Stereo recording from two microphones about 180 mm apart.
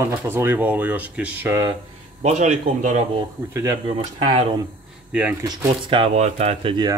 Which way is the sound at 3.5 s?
15° right (ahead or behind).